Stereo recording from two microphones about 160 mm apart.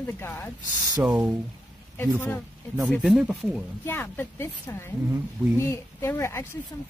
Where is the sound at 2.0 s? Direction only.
10° left (ahead or behind).